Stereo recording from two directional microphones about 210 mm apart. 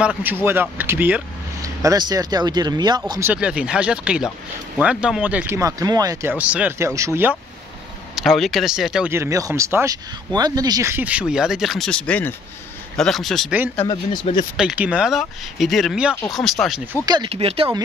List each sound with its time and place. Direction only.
0.0 s speech: 5° right (ahead or behind)
8.2 s speech: centre (ahead or behind)
13.8 s speech: 25° left (ahead or behind)
14.6 s speech: 5° right (ahead or behind)
17.0 s speech: 20° right (ahead or behind)